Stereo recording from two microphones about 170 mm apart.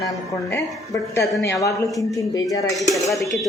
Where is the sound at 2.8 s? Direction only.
Centre (ahead or behind).